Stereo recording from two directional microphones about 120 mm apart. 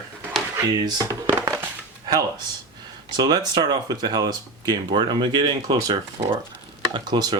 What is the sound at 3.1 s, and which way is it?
Speech, 35° right (ahead or behind).